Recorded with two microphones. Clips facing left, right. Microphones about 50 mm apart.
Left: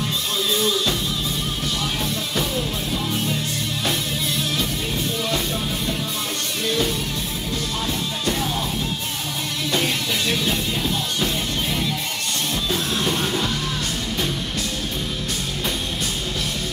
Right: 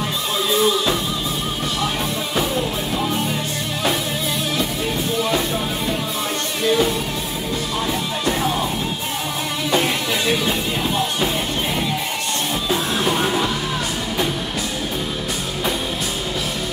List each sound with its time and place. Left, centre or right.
0.5 s music: centre
2.3 s music: centre
6.6 s music: centre
8.3 s music: centre
9.7 s music: centre
12.6 s music: centre